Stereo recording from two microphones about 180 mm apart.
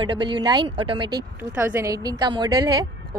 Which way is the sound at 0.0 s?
25° right (ahead or behind).